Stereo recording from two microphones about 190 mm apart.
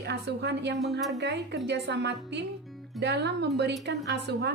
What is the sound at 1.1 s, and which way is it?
A woman's voice, 65° right (ahead or behind).